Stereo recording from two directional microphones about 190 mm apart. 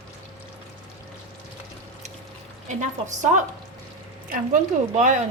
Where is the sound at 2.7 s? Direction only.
40° right (ahead or behind).